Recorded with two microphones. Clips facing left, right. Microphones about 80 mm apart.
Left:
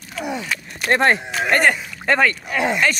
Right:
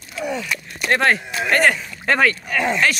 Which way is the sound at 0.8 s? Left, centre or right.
Left.